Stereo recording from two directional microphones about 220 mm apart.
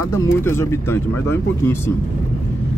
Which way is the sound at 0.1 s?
10° left (ahead or behind).